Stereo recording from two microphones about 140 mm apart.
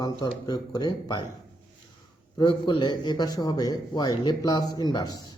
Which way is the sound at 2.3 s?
35° left (ahead or behind).